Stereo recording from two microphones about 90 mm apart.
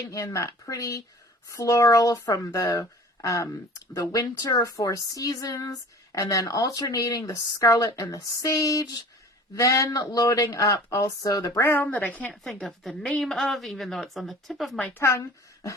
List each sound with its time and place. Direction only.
0.1 s speech: 40° left (ahead or behind); by 12.3 s 15° left (ahead or behind)
12.3 s a woman's voice: centre (ahead or behind)
14.9 s a woman's voice: 35° left (ahead or behind)